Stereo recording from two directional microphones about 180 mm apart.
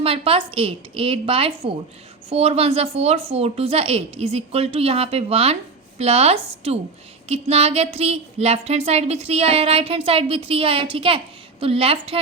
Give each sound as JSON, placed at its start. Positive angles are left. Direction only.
{"t": 0.0, "sound": "a woman's voice", "side_deg": -30}